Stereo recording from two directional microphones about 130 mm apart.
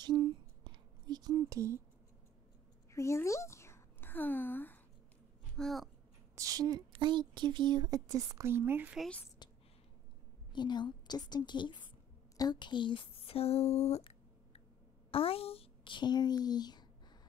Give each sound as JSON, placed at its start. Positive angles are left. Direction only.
{"t": 0.0, "sound": "a sound", "side_deg": -35}
{"t": 2.9, "sound": "a sound", "side_deg": 20}
{"t": 5.6, "sound": "speech", "side_deg": 0}
{"t": 6.3, "sound": "speech", "side_deg": -25}
{"t": 9.4, "sound": "whispering", "side_deg": 35}
{"t": 10.5, "sound": "a woman's voice", "side_deg": 35}
{"t": 15.0, "sound": "speech", "side_deg": 45}